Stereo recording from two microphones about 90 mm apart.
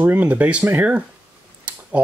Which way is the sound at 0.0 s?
15° right (ahead or behind).